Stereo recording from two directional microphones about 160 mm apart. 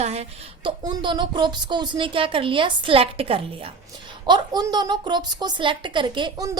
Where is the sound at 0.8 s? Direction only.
25° right (ahead or behind).